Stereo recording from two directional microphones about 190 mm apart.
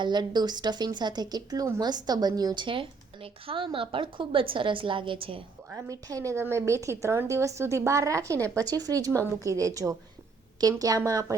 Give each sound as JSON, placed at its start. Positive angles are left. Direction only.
{"t": 0.0, "sound": "speech", "side_deg": -20}
{"t": 5.7, "sound": "a woman's voice", "side_deg": -15}